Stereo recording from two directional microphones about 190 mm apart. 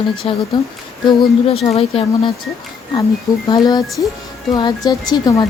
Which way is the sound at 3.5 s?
20° left (ahead or behind).